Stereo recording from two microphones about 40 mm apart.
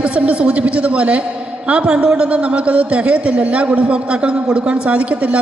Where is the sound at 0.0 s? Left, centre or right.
Right.